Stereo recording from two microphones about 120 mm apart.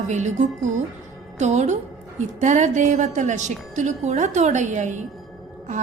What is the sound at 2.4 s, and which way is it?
A woman's voice, 80° right.